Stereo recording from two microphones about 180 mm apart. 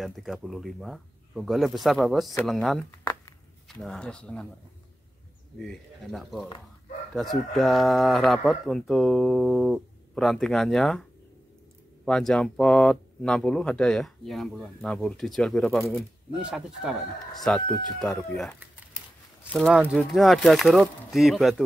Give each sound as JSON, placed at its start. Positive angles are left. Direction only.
{"t": 0.0, "sound": "speech", "side_deg": 0}
{"t": 3.0, "sound": "a sound", "side_deg": 15}
{"t": 3.6, "sound": "speech", "side_deg": 0}
{"t": 5.6, "sound": "speech", "side_deg": 0}
{"t": 7.5, "sound": "speech", "side_deg": 0}